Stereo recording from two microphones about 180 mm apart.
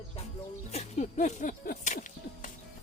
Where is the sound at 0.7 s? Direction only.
40° left (ahead or behind).